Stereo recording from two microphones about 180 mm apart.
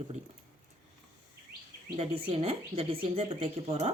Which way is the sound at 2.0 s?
35° right (ahead or behind).